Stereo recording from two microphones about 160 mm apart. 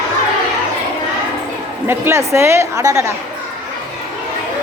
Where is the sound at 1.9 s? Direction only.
15° right (ahead or behind).